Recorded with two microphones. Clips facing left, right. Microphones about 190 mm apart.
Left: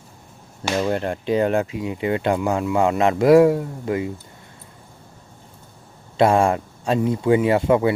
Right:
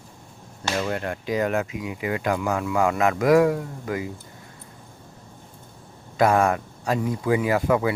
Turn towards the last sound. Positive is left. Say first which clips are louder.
# left 4 dB
turn(degrees=25)  # may be behind; listen again after turning